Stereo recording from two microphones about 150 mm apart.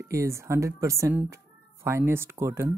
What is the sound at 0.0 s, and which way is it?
Speech, 20° right (ahead or behind).